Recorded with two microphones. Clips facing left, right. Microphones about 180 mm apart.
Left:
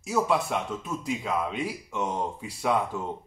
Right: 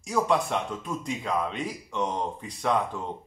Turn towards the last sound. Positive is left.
turn(degrees=5)  # may be behind; listen again after turning